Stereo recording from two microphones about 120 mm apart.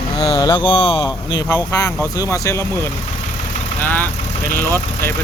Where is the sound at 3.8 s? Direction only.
15° left (ahead or behind).